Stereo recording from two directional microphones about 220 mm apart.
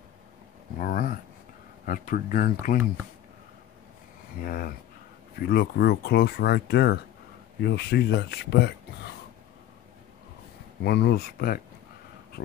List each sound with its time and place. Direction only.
0.7 s speech: 40° left (ahead or behind)
4.4 s speech: 40° left (ahead or behind)
10.8 s speech: 45° left (ahead or behind)